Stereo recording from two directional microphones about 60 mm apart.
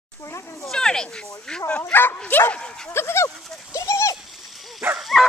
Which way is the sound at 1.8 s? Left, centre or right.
Left.